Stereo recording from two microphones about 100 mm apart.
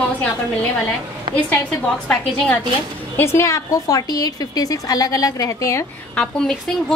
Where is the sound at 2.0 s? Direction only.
15° left (ahead or behind).